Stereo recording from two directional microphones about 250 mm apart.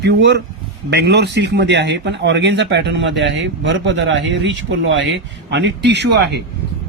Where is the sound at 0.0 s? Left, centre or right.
Right.